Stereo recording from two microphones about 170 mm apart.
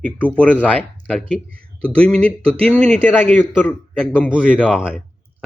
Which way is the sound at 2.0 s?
5° left (ahead or behind).